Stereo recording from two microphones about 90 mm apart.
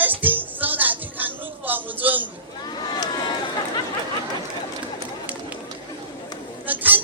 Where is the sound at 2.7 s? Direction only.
50° left (ahead or behind).